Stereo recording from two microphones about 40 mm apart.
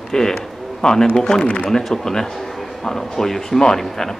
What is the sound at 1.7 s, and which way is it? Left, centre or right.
A man's voice, centre.